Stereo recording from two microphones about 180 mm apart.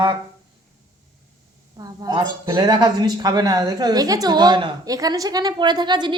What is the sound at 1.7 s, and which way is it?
Speech, 20° right (ahead or behind).